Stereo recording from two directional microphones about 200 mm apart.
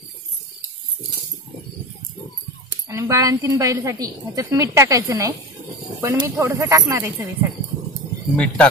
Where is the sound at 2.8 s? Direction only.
15° right (ahead or behind).